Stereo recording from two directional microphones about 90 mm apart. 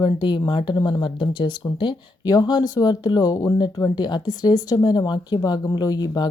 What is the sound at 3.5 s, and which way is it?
Speech, 55° left (ahead or behind).